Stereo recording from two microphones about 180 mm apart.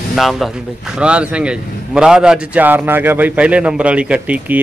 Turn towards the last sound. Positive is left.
turn(degrees=-5)  # may be behind; listen again after turning